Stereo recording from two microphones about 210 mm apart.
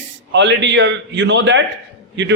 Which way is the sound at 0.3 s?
60° right (ahead or behind).